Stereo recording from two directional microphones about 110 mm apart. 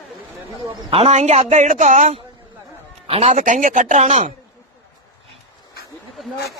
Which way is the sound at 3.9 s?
90° right.